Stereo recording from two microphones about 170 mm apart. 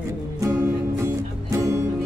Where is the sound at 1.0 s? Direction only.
15° right (ahead or behind).